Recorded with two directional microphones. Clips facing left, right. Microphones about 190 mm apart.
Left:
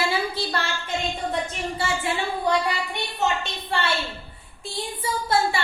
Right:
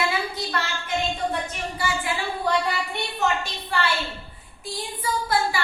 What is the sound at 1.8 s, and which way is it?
Speech, 25° left (ahead or behind).